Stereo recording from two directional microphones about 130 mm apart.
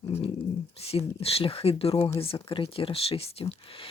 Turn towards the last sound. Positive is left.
turn(degrees=45)  # may be behind; listen again after turning